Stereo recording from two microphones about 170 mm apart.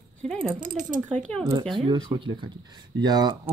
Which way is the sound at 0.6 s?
50° right (ahead or behind).